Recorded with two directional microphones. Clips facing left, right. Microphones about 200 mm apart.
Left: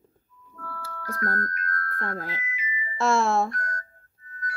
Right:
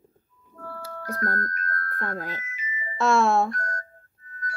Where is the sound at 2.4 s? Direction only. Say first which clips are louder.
Left 2 dB; 45° right (ahead or behind).